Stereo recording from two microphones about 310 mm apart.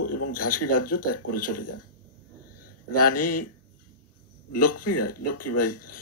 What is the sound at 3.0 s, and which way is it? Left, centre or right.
Speech, left.